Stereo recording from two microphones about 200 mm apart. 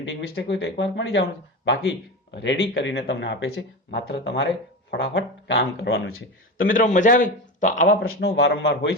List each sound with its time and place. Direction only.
0.0 s speech: 65° left (ahead or behind)
6.6 s a man's voice: 40° left (ahead or behind)
8.1 s speech: 55° left (ahead or behind)